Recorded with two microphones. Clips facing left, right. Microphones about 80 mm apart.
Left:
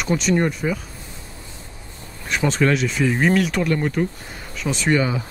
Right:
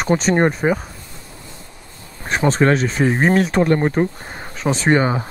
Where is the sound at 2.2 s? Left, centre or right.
Right.